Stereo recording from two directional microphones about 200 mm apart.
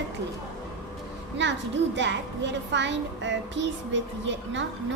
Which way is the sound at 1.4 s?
65° right (ahead or behind).